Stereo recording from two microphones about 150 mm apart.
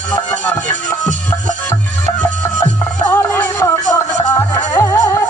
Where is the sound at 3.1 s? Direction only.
15° left (ahead or behind).